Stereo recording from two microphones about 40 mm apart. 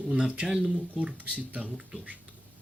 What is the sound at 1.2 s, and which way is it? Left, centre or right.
Speech, right.